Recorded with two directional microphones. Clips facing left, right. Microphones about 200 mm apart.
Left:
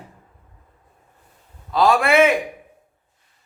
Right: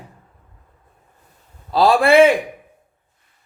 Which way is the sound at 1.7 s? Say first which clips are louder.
Right 3 dB; 35° right (ahead or behind).